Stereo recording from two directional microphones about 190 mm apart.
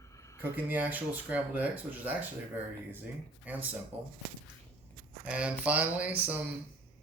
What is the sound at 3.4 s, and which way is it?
Speech, 10° right (ahead or behind).